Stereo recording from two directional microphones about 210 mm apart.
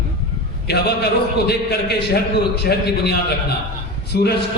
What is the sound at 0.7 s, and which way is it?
A man's voice, 50° left (ahead or behind).